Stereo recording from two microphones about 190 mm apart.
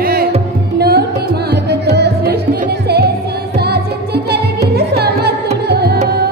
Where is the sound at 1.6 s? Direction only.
60° right (ahead or behind).